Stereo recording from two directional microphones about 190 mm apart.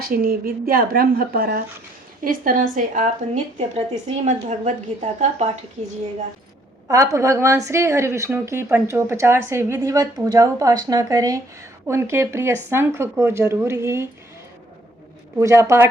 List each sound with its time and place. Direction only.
0.0 s a woman's voice: 50° right (ahead or behind)
6.8 s a woman's voice: 15° right (ahead or behind)
15.4 s a woman's voice: 15° right (ahead or behind)